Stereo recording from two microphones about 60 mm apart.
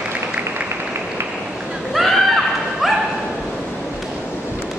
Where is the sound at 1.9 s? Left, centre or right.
Centre.